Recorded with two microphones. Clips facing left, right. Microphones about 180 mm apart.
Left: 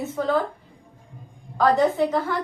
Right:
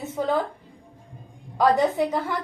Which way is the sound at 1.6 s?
15° right (ahead or behind).